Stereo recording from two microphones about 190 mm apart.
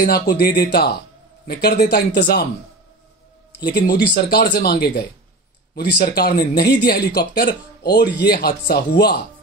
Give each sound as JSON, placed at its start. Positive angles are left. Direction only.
{"t": 0.0, "sound": "speech", "side_deg": 55}
{"t": 4.0, "sound": "speech", "side_deg": 55}